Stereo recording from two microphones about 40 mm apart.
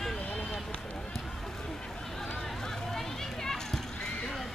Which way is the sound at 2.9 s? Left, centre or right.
Centre.